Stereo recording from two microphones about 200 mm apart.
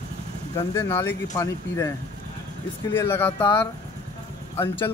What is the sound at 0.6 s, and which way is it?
Speech, 10° left (ahead or behind).